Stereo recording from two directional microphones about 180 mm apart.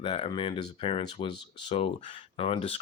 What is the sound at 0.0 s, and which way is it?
Speech, 30° left (ahead or behind).